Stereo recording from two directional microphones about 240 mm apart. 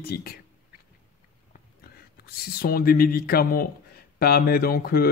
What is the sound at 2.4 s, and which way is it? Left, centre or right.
Speech, left.